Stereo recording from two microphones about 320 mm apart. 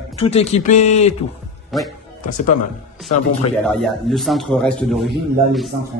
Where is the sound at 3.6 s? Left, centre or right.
Centre.